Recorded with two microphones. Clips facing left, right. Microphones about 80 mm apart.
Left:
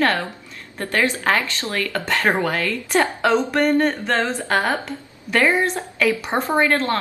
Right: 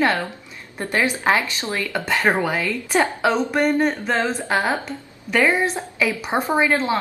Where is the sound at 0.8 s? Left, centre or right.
Centre.